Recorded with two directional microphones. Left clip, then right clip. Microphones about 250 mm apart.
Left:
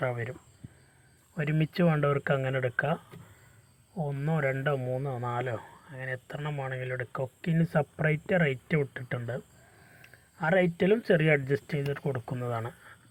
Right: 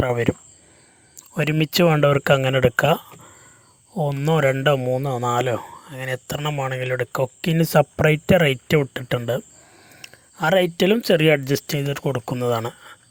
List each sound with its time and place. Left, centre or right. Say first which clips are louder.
0.0 s speech: right 12 dB; right
1.4 s speech: right 11 dB; right